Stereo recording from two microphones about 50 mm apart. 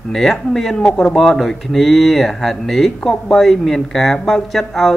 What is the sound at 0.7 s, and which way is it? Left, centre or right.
Speech, centre.